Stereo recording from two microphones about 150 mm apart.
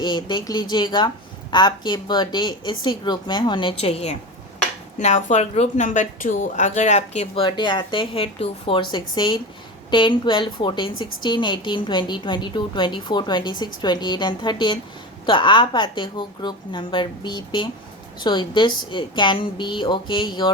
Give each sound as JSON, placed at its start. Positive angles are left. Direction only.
{"t": 0.0, "sound": "a woman's voice", "side_deg": 30}
{"t": 7.4, "sound": "a woman's voice", "side_deg": 30}